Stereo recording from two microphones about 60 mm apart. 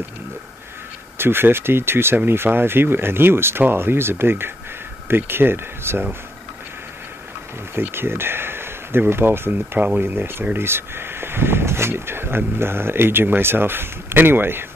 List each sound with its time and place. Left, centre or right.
1.1 s speech: right
7.7 s a sound: right
9.1 s speech: right